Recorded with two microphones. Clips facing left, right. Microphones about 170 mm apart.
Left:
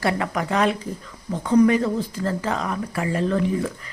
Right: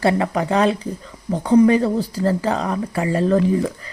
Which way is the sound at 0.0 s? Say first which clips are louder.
Right 5 dB; 30° right (ahead or behind).